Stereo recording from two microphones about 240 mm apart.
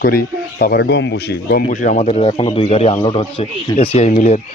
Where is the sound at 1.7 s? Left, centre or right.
Left.